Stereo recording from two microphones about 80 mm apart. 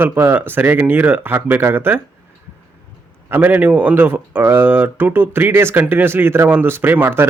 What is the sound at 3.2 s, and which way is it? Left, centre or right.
Speech, right.